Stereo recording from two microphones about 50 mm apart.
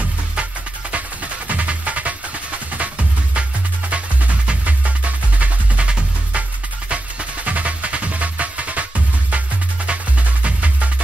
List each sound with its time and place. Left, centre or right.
0.9 s music: right